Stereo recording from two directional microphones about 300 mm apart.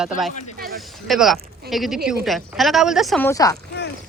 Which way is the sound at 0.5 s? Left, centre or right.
Right.